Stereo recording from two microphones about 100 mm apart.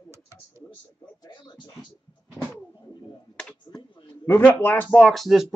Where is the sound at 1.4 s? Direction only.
55° left (ahead or behind).